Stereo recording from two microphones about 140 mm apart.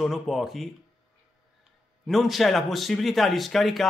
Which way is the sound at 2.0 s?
Centre (ahead or behind).